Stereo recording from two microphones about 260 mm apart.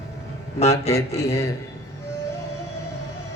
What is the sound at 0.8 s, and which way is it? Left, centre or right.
Speech, left.